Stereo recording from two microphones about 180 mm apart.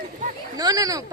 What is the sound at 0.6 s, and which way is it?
Speech, 20° right (ahead or behind).